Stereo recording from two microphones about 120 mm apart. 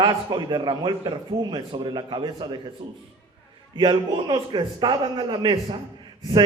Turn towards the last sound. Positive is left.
turn(degrees=-35)  # may be behind; listen again after turning